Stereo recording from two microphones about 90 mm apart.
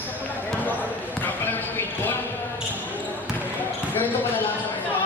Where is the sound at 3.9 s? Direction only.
20° left (ahead or behind).